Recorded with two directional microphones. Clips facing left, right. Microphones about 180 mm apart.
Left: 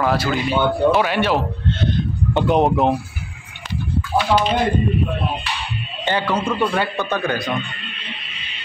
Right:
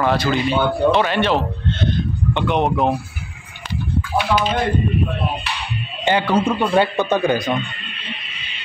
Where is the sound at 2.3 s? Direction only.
40° left (ahead or behind).